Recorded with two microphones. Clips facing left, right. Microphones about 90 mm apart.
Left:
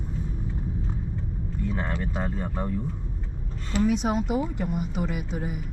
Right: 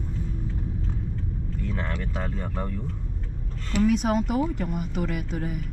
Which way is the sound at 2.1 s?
15° left (ahead or behind).